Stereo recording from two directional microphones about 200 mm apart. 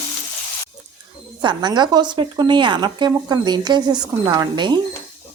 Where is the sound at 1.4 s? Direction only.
20° right (ahead or behind).